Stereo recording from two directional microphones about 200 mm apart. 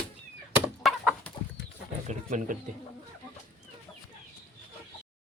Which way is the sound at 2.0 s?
40° right (ahead or behind).